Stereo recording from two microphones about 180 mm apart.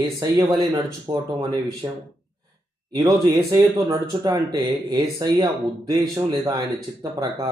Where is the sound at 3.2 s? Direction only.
20° right (ahead or behind).